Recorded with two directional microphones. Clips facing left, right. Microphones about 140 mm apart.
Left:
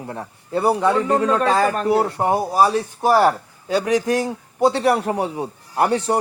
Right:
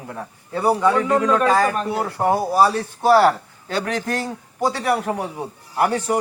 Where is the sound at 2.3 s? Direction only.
15° left (ahead or behind).